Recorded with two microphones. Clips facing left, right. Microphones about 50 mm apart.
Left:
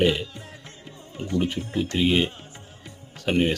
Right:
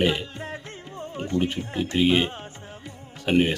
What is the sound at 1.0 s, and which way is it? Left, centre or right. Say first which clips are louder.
Music: right 1 dB; right.